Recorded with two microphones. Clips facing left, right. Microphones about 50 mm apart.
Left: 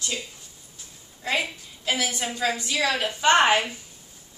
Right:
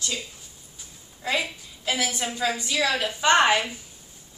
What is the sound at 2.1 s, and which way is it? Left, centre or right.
Speech, centre.